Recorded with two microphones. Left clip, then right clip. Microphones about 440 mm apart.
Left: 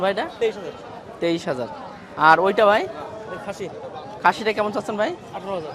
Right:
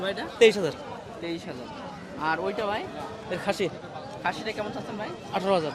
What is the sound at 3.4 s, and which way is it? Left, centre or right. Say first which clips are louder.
Speech: right 6 dB; right.